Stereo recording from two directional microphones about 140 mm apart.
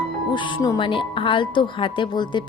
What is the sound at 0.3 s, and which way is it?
Speech, 35° left (ahead or behind).